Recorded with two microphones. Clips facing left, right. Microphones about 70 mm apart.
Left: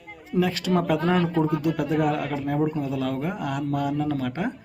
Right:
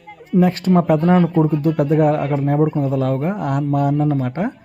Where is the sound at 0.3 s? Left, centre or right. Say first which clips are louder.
Right 7 dB; right.